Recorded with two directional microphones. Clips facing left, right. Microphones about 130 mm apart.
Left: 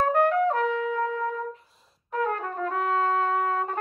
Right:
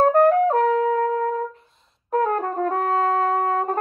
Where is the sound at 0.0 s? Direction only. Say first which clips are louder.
Right 6 dB; 40° right (ahead or behind).